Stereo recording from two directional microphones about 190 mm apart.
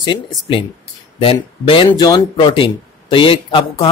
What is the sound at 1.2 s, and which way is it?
Speech, 25° left (ahead or behind).